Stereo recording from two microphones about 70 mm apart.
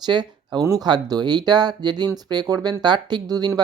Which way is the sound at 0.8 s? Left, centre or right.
Right.